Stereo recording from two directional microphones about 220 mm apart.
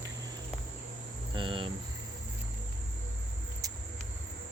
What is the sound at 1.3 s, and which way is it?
Cricket, 20° right (ahead or behind).